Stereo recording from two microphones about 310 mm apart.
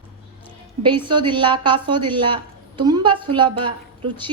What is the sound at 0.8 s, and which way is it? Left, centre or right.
A woman's voice, centre.